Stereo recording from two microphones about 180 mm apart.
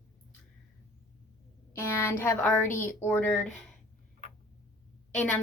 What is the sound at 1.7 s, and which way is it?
A woman's voice, 15° left (ahead or behind).